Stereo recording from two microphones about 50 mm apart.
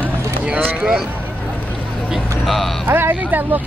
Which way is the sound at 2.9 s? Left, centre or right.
Right.